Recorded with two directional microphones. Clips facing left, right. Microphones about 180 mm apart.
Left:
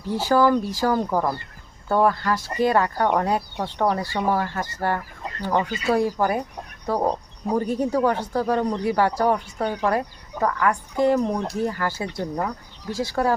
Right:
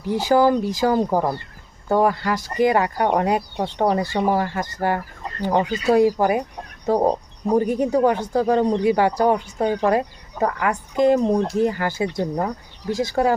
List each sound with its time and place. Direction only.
0.0 s speech: 15° right (ahead or behind)
7.6 s speech: 15° right (ahead or behind)